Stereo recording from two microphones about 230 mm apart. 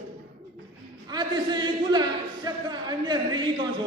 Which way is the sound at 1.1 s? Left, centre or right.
Centre.